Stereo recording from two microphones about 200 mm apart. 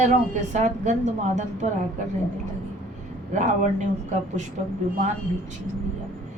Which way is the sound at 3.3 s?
40° right (ahead or behind).